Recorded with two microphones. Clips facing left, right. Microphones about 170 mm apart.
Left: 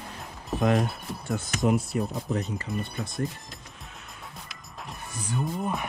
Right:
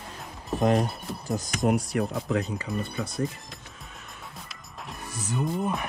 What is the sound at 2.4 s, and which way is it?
Speech, centre (ahead or behind).